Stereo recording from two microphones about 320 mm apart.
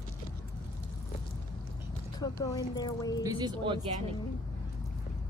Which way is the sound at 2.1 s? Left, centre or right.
Centre.